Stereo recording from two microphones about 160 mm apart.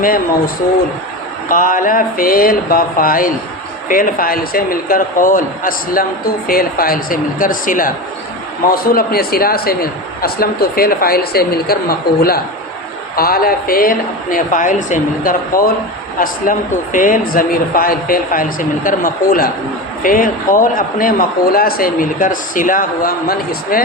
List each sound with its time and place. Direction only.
0.0 s a man's voice: 60° left (ahead or behind)